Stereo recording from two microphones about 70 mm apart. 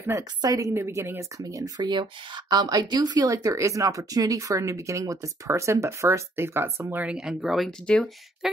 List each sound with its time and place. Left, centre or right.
0.4 s speech: right
1.4 s speech: right
7.1 s speech: centre
7.8 s speech: centre